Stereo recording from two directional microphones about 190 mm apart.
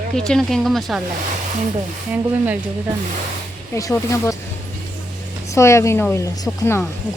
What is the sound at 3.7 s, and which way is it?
Speech, 15° left (ahead or behind).